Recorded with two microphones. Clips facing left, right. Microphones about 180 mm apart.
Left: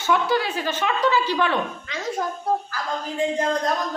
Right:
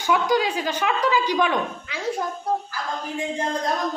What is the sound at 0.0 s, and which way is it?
Speech, 15° right (ahead or behind).